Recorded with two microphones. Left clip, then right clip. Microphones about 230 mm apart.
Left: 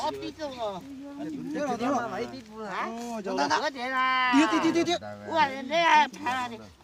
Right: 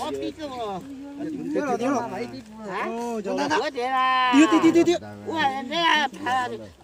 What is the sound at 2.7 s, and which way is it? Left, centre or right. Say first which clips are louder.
Speech: right 5 dB; left.